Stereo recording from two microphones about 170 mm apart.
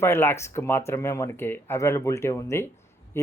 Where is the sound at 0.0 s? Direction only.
15° left (ahead or behind).